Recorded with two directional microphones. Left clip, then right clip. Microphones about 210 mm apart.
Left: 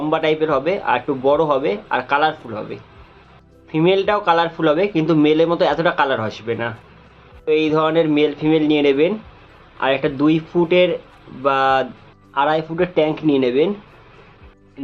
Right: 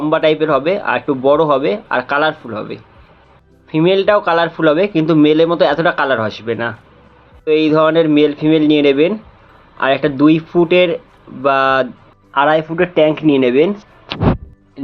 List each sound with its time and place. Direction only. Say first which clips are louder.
0.0 s speech: right 5 dB; 20° right (ahead or behind)